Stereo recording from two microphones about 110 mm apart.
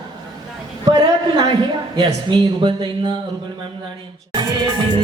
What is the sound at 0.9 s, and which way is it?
A woman's voice, 40° right (ahead or behind).